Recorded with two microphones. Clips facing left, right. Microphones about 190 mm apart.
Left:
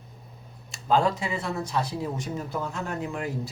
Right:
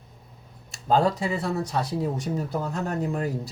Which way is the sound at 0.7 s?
40° right (ahead or behind).